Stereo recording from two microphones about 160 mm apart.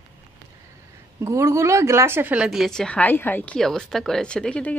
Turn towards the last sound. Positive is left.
turn(degrees=5)  # may be behind; listen again after turning